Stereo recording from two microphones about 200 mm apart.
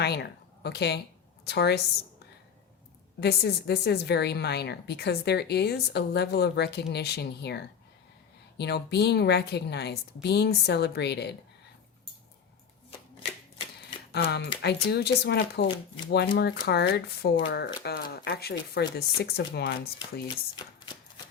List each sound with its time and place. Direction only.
0.0 s a woman's voice: 55° left (ahead or behind)
3.2 s a woman's voice: 55° left (ahead or behind)
14.1 s a woman's voice: 55° left (ahead or behind)
20.6 s speech: 20° left (ahead or behind)